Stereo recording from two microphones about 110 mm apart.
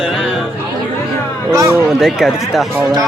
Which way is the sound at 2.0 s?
5° right (ahead or behind).